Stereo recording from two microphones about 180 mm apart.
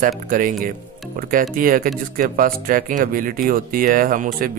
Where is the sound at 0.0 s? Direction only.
50° right (ahead or behind).